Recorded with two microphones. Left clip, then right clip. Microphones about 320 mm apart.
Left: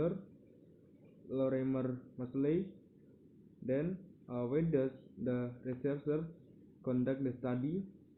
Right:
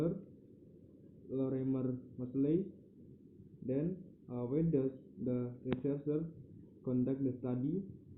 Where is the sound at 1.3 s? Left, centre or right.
Left.